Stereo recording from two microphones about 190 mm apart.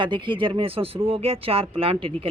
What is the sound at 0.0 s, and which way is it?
A man's voice, 25° right (ahead or behind).